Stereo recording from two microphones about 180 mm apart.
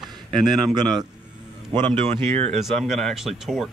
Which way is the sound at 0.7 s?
25° right (ahead or behind).